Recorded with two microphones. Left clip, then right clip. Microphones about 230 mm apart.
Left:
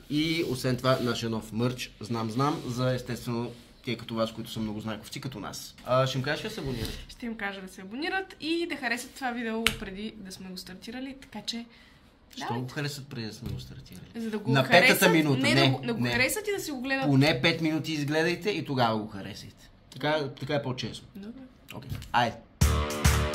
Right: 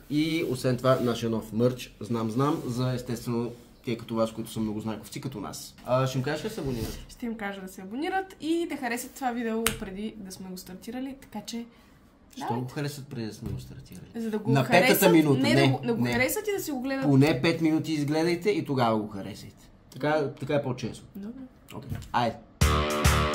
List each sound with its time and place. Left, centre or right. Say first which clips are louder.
0.1 s speech: right 1 dB; centre
7.2 s a woman's voice: even; centre
12.4 s speech: right 1 dB; centre
14.1 s a woman's voice: right 3 dB; right
14.5 s speech: left 1 dB; centre
16.2 s a woman's voice: even; right
17.1 s speech: right 2 dB; centre
21.7 s music: left 2 dB; centre